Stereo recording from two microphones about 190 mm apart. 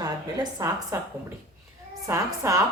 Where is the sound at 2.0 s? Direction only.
15° right (ahead or behind).